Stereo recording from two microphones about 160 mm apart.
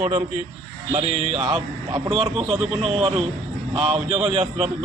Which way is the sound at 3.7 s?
40° right (ahead or behind).